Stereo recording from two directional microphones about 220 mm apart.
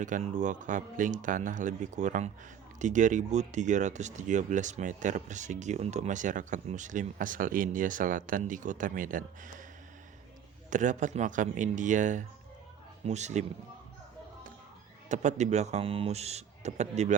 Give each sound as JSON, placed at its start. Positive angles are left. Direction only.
{"t": 0.0, "sound": "speech", "side_deg": -35}
{"t": 10.7, "sound": "speech", "side_deg": -35}
{"t": 15.1, "sound": "speech", "side_deg": -30}